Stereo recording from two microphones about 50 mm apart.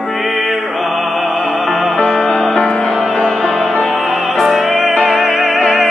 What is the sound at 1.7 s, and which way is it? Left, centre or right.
Music, centre.